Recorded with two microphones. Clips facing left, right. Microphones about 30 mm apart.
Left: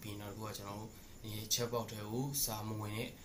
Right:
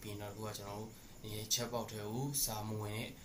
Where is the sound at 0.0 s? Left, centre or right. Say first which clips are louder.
Right 1 dB; centre.